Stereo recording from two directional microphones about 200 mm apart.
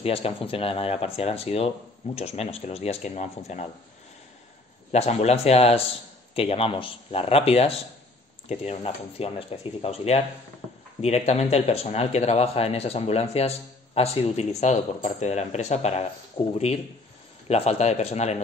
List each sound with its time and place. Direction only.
0.0 s speech: 30° left (ahead or behind)
4.9 s speech: 30° left (ahead or behind)
16.4 s speech: 15° left (ahead or behind)
17.5 s speech: 30° left (ahead or behind)